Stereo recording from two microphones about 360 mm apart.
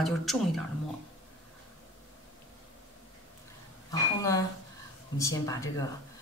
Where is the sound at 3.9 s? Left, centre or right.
Centre.